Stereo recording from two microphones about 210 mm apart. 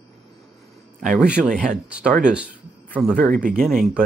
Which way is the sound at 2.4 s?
5° left (ahead or behind).